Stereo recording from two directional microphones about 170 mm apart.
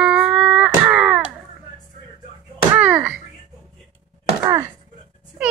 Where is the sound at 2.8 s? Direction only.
10° right (ahead or behind).